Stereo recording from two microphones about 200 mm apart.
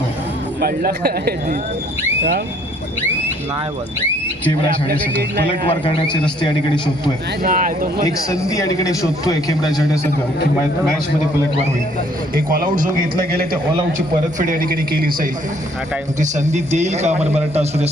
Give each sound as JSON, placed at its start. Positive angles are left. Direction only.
{"t": 0.6, "sound": "a man's voice", "side_deg": -50}
{"t": 5.5, "sound": "a man's voice", "side_deg": 25}
{"t": 7.4, "sound": "a man's voice", "side_deg": -45}
{"t": 8.0, "sound": "a man's voice", "side_deg": 15}
{"t": 12.3, "sound": "a man's voice", "side_deg": -45}
{"t": 16.2, "sound": "speech", "side_deg": -35}